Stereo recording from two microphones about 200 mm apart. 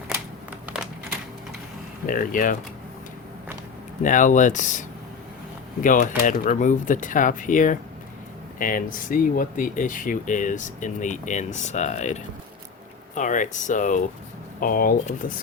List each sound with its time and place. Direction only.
2.0 s speech: 45° left (ahead or behind)
4.0 s speech: 40° left (ahead or behind)